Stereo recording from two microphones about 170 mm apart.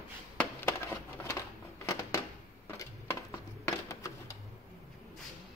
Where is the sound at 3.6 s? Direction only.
15° left (ahead or behind).